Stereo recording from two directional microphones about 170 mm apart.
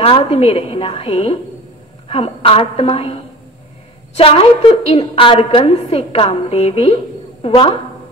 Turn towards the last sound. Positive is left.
turn(degrees=35)  # may be behind; listen again after turning